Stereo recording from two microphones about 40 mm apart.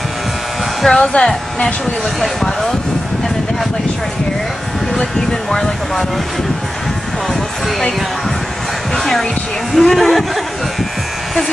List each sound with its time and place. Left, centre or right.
0.8 s a woman's voice: centre
2.1 s a woman's voice: centre
8.9 s speech: centre